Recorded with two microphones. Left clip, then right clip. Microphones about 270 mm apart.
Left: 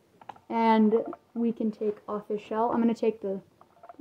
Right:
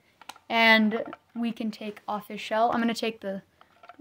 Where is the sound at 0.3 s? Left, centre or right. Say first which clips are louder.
Right 4 dB; right.